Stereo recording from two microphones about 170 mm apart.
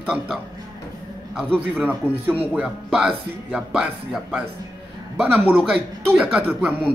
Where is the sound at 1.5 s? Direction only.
10° right (ahead or behind).